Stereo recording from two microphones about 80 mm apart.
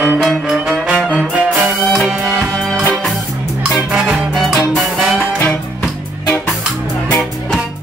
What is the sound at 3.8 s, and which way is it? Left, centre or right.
Music, centre.